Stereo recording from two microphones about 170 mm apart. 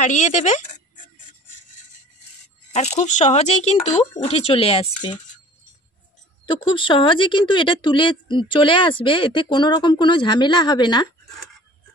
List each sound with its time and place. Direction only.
0.0 s speech: 45° left (ahead or behind)
2.7 s speech: 40° left (ahead or behind)
6.4 s speech: 30° left (ahead or behind)